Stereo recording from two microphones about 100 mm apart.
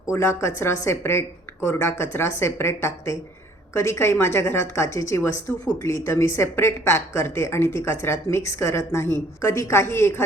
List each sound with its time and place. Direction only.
0.1 s a woman's voice: 25° left (ahead or behind)